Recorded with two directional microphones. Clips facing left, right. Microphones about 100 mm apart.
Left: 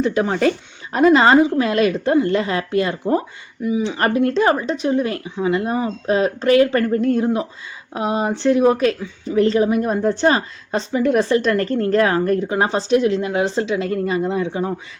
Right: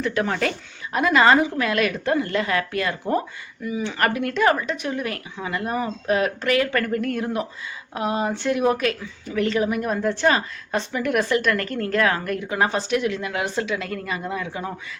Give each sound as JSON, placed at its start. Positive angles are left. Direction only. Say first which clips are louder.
{"t": 0.0, "sound": "speech", "louder": "left 6 dB", "side_deg": 25}